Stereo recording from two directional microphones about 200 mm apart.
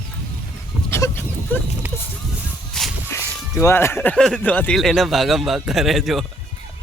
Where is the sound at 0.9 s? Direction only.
15° left (ahead or behind).